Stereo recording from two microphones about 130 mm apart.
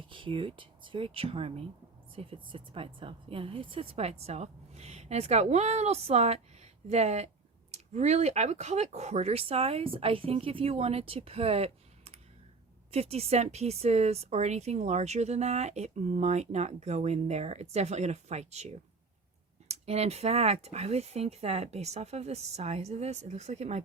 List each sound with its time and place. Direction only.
0.1 s speech: 40° right (ahead or behind); by 18.7 s 60° right (ahead or behind)
19.7 s speech: 55° right (ahead or behind)